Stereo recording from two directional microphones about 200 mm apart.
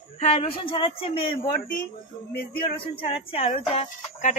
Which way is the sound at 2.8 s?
25° left (ahead or behind).